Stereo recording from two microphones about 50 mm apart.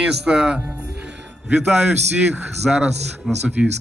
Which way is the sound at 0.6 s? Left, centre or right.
Right.